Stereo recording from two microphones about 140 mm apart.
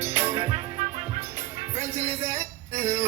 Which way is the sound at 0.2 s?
20° right (ahead or behind).